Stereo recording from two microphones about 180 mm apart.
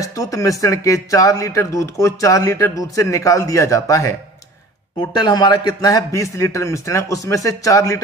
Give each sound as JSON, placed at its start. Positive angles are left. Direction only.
{"t": 0.0, "sound": "speech", "side_deg": 20}
{"t": 5.1, "sound": "a man's voice", "side_deg": 25}